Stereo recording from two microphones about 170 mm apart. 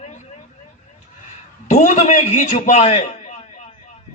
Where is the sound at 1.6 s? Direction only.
45° left (ahead or behind).